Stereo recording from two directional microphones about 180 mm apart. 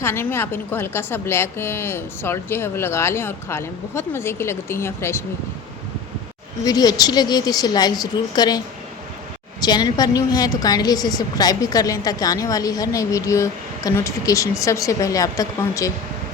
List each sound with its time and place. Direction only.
0.0 s a woman's voice: 15° left (ahead or behind)
6.7 s a woman's voice: 20° left (ahead or behind)